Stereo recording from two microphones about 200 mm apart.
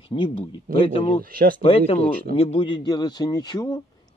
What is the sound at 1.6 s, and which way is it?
A man's voice, 30° left (ahead or behind).